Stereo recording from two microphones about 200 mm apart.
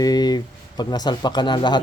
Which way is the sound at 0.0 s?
20° left (ahead or behind).